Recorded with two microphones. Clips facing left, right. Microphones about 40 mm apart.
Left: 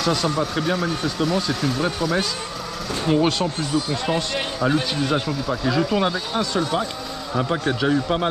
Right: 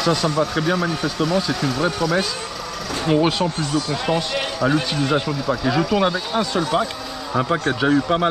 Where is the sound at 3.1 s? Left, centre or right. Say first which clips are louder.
Right 2 dB; centre.